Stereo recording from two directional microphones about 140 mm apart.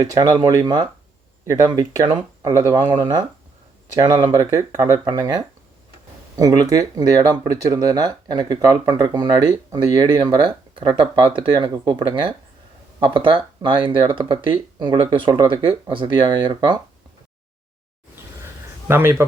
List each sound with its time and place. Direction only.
0.0 s speech: 25° right (ahead or behind)
18.9 s speech: 15° right (ahead or behind)